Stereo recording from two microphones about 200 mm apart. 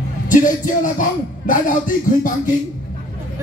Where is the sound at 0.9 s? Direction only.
40° left (ahead or behind).